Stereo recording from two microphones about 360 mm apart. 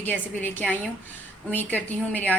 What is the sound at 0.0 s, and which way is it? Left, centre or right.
A woman's voice, centre.